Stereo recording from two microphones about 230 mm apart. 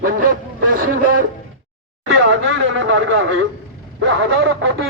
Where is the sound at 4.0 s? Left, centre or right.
Right.